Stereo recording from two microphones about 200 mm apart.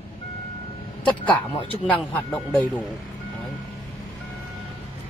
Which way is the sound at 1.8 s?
5° left (ahead or behind).